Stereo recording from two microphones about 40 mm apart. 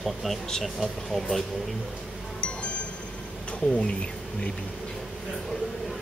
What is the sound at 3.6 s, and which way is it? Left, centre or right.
Speech, left.